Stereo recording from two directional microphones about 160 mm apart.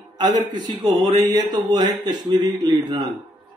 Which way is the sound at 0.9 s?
30° right (ahead or behind).